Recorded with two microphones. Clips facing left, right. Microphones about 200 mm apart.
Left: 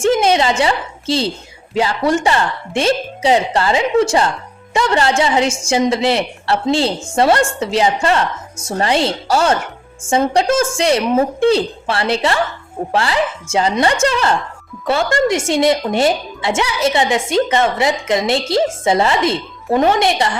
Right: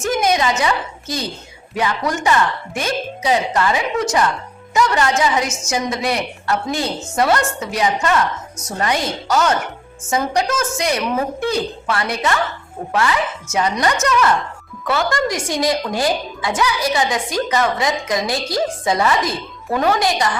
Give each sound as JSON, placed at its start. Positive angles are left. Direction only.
{"t": 0.0, "sound": "a woman's voice", "side_deg": 30}